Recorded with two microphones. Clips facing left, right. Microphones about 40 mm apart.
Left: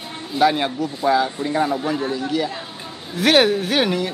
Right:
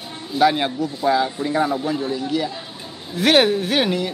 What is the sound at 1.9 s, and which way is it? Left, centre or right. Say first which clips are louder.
Speech: left 1 dB; centre.